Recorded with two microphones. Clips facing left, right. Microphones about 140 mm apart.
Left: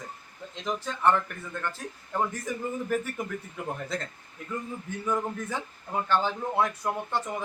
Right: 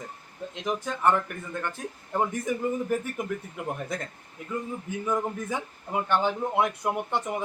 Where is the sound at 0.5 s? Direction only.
15° right (ahead or behind).